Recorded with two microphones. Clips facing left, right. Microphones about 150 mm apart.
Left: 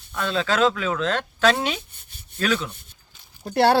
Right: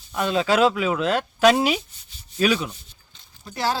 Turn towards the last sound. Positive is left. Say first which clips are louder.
# left 7 dB
turn(degrees=65)  # may be behind; listen again after turning